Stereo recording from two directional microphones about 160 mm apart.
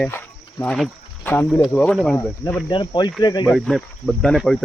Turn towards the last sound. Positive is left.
turn(degrees=0)  # may be behind; listen again after turning